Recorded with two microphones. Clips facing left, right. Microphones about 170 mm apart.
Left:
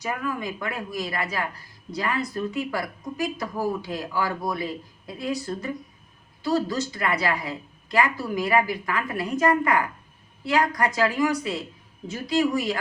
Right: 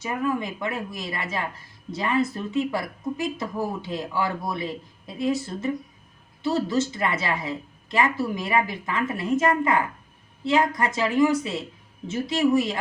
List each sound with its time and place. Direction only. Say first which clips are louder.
0.0 s speech: right 3 dB; 25° right (ahead or behind)